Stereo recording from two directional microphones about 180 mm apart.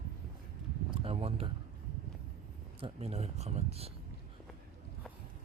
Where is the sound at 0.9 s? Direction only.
35° right (ahead or behind).